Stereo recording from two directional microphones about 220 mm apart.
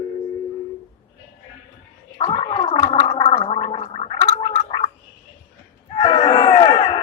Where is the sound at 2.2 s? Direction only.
25° left (ahead or behind).